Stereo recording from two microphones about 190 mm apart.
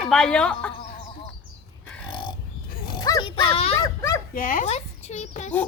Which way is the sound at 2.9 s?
20° left (ahead or behind).